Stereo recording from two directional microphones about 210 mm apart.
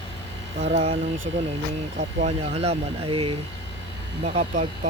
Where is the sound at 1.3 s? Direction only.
30° right (ahead or behind).